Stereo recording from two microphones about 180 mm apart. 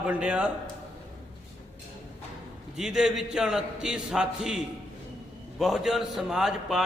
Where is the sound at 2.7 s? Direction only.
5° right (ahead or behind).